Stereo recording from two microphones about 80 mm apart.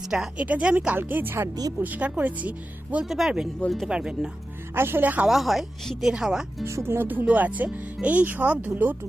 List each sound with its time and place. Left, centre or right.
0.1 s speech: centre
0.9 s speech: right
3.1 s speech: centre
4.7 s speech: right
5.2 s speech: centre
6.7 s speech: right